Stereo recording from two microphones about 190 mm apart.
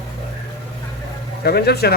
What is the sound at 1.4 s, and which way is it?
Speech, 55° left (ahead or behind).